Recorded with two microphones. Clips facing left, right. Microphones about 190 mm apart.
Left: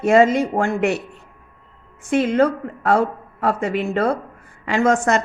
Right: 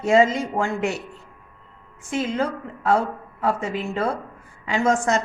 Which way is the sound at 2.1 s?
60° left (ahead or behind).